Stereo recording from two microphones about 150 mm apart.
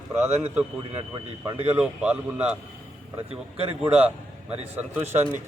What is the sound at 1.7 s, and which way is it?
Speech, 10° right (ahead or behind).